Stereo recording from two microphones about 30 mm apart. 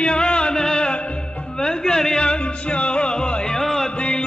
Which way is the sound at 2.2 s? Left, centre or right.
Left.